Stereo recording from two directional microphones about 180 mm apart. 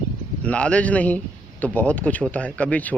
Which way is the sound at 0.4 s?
5° left (ahead or behind).